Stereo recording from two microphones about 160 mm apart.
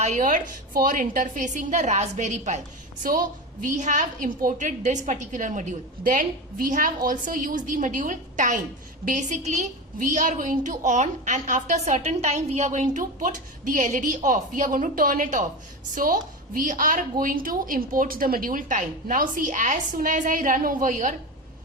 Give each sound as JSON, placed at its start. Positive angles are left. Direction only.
{"t": 0.0, "sound": "a woman's voice", "side_deg": -50}
{"t": 3.0, "sound": "a woman's voice", "side_deg": -60}